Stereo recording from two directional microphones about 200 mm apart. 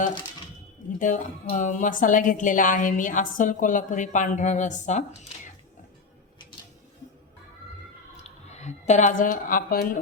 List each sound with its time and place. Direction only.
0.9 s a woman's voice: 40° left (ahead or behind)
8.1 s a woman's voice: 35° left (ahead or behind)